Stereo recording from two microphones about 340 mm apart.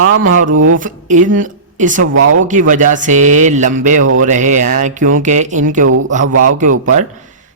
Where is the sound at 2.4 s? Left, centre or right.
Right.